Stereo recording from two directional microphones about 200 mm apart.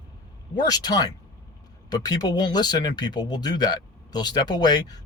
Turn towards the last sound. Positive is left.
turn(degrees=20)  # may be behind; listen again after turning